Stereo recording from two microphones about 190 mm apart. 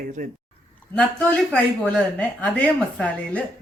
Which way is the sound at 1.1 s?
5° left (ahead or behind).